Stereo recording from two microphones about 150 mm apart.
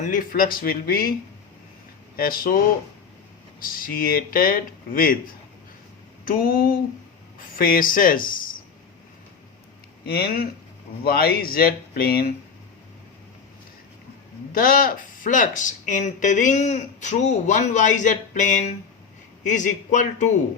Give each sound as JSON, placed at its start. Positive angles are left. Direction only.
{"t": 0.0, "sound": "speech", "side_deg": 65}
{"t": 2.1, "sound": "speech", "side_deg": 75}
{"t": 3.6, "sound": "speech", "side_deg": 70}
{"t": 10.1, "sound": "speech", "side_deg": 90}
{"t": 14.5, "sound": "speech", "side_deg": 70}